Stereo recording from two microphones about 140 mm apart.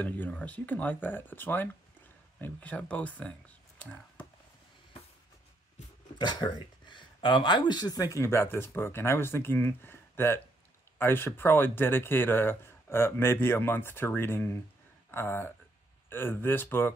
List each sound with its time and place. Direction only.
0.0 s speech: 10° left (ahead or behind)
6.1 s speech: 30° left (ahead or behind); by 16.9 s 15° left (ahead or behind)